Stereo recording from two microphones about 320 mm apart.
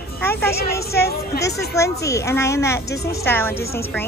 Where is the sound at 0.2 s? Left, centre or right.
Centre.